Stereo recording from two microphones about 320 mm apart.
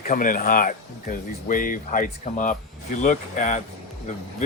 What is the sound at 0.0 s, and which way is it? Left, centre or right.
Speech, left.